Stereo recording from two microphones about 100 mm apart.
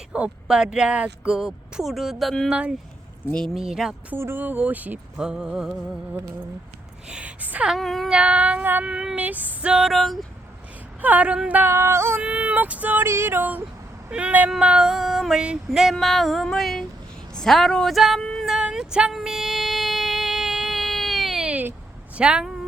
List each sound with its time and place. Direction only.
0.1 s child singing: 10° right (ahead or behind)
2.5 s child singing: 10° right (ahead or behind)
3.3 s female singing: centre (ahead or behind)
4.1 s child singing: 20° right (ahead or behind); by 5.7 s 5° right (ahead or behind)
7.1 s speech: 15° right (ahead or behind)
7.7 s child singing: centre (ahead or behind)
11.0 s child singing: 15° right (ahead or behind)
11.3 s music: 15° right (ahead or behind)
12.2 s child singing: 10° right (ahead or behind)
14.5 s female singing: 10° right (ahead or behind)
17.3 s speech: 5° left (ahead or behind)
18.5 s a sound: 5° right (ahead or behind)
22.2 s child singing: 10° right (ahead or behind)